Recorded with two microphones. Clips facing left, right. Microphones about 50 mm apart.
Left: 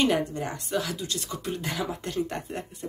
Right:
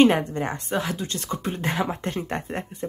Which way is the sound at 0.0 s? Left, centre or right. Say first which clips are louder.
Right 6 dB; right.